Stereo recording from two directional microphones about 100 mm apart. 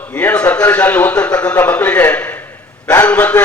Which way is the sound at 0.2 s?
15° left (ahead or behind).